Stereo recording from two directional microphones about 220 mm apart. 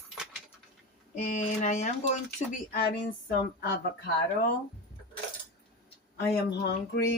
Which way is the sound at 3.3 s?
45° left (ahead or behind).